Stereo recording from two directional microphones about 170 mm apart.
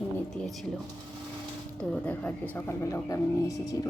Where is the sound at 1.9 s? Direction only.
10° left (ahead or behind).